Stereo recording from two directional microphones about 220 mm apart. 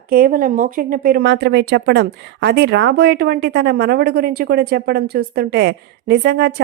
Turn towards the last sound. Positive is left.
turn(degrees=-50)  # may be behind; listen again after turning